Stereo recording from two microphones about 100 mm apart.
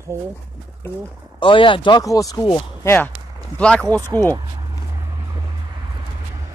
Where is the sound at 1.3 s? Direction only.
55° left (ahead or behind).